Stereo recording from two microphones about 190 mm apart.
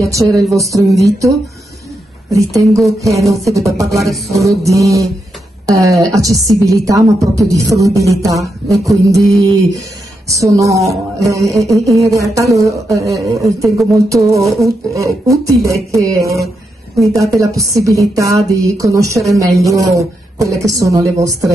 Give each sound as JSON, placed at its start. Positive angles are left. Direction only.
{"t": 0.0, "sound": "a woman's voice", "side_deg": -15}
{"t": 2.3, "sound": "a woman's voice", "side_deg": -15}
{"t": 4.0, "sound": "music", "side_deg": 0}
{"t": 4.5, "sound": "a woman's voice", "side_deg": -15}